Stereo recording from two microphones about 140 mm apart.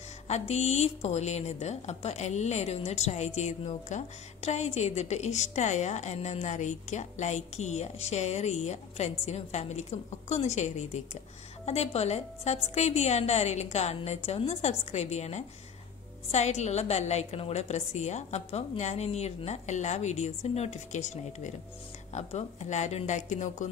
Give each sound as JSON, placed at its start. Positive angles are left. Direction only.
{"t": 0.3, "sound": "a woman's voice", "side_deg": 50}